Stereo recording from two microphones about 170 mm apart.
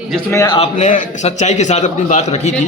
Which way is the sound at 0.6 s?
45° left (ahead or behind).